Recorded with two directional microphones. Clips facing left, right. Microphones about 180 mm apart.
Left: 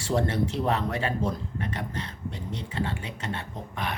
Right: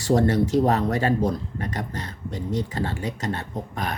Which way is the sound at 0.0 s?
40° right (ahead or behind).